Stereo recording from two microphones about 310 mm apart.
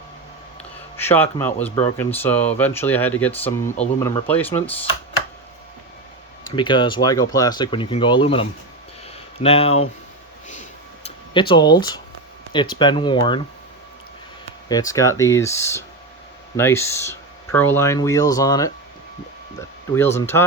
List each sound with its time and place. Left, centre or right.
0.9 s speech: centre
6.6 s speech: centre
11.3 s speech: centre
14.7 s speech: centre